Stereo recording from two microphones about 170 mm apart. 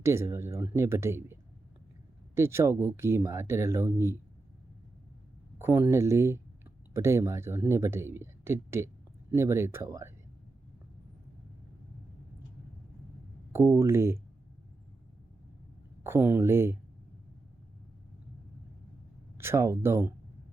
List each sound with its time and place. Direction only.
0.0 s speech: 15° right (ahead or behind)
5.5 s speech: 15° right (ahead or behind)
13.5 s speech: 15° right (ahead or behind)
16.0 s speech: 10° right (ahead or behind)
19.4 s speech: 15° right (ahead or behind)